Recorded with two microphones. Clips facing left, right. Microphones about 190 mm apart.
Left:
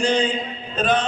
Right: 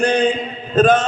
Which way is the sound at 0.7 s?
45° right (ahead or behind).